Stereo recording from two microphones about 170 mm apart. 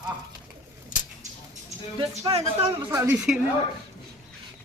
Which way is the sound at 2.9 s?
15° right (ahead or behind).